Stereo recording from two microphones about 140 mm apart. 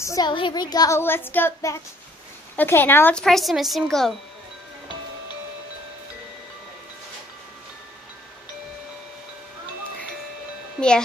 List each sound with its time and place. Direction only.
0.0 s speech: 25° left (ahead or behind)
0.3 s a woman's voice: 35° left (ahead or behind); by 4.1 s centre (ahead or behind)